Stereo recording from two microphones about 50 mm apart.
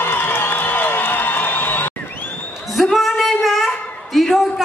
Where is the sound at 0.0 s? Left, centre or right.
Left.